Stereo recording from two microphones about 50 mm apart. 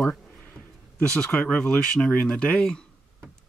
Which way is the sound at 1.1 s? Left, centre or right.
Centre.